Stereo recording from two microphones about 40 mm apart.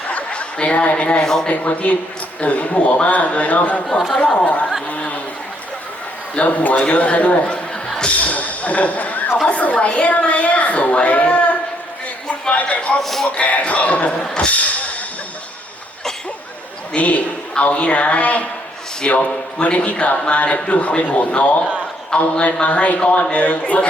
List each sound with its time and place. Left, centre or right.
0.1 s a sound: left
1.2 s speech: centre
1.5 s a woman's voice: left
4.9 s a sound: left
6.3 s a man's voice: left
8.2 s a sound: left
9.5 s a woman's voice: left
12.3 s a sound: left
13.0 s speech: centre
13.2 s a woman's voice: left
16.9 s a woman's voice: left
19.0 s a man's voice: left
22.1 s a man's voice: left
22.6 s a woman's voice: left